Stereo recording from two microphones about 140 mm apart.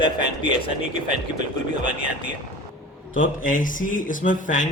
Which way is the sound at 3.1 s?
70° left (ahead or behind).